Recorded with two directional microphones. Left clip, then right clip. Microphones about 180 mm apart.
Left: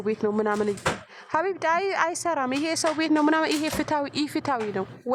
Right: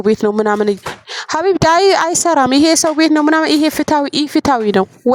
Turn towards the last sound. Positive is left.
turn(degrees=-60)  # may be behind; listen again after turning